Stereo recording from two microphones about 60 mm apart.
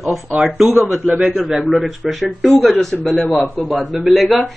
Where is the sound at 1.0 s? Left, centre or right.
Right.